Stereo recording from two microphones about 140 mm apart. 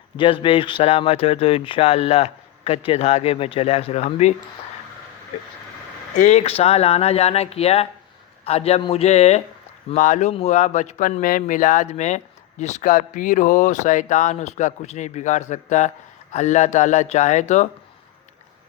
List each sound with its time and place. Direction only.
0.2 s speech: 40° left (ahead or behind)
6.1 s speech: 55° left (ahead or behind)